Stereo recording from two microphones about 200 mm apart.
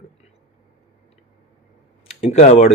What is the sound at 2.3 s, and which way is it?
Speech, 35° left (ahead or behind).